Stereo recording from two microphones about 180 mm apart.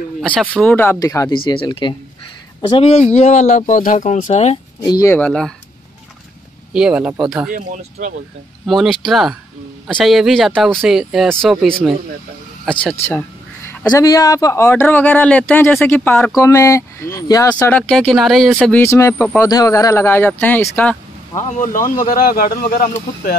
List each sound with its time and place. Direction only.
0.2 s speech: 5° left (ahead or behind); by 4.6 s 40° left (ahead or behind)
4.8 s speech: 20° left (ahead or behind)
5.1 s speech: 5° left (ahead or behind)
6.7 s speech: 5° right (ahead or behind)
7.5 s speech: 45° right (ahead or behind)
8.6 s speech: centre (ahead or behind)
13.7 s speech: 20° left (ahead or behind)
21.4 s speech: 45° left (ahead or behind)